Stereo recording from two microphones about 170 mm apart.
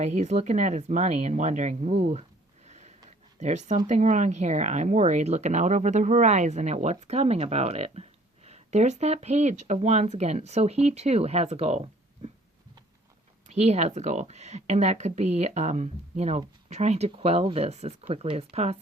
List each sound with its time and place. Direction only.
0.0 s speech: 40° right (ahead or behind)
2.6 s a sound: 40° right (ahead or behind)
3.8 s speech: 45° right (ahead or behind)
13.5 s speech: 40° right (ahead or behind)